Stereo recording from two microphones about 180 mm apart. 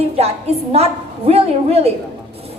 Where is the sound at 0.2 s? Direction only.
35° right (ahead or behind).